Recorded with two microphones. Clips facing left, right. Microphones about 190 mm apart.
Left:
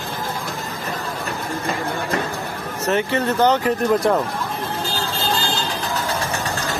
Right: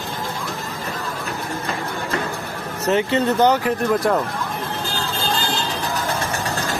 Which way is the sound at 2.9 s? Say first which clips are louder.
Right 2 dB; 20° right (ahead or behind).